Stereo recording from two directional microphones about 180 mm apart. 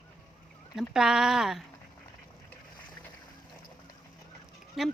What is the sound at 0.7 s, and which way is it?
Speech, centre (ahead or behind).